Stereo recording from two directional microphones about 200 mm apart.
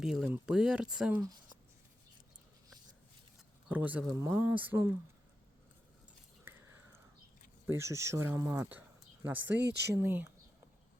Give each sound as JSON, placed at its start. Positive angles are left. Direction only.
{"t": 0.0, "sound": "speech", "side_deg": -5}
{"t": 1.2, "sound": "a sound", "side_deg": -20}
{"t": 3.7, "sound": "speech", "side_deg": -10}
{"t": 6.4, "sound": "a sound", "side_deg": -10}
{"t": 7.7, "sound": "speech", "side_deg": -15}
{"t": 9.6, "sound": "speech", "side_deg": -60}
{"t": 9.9, "sound": "speech", "side_deg": -10}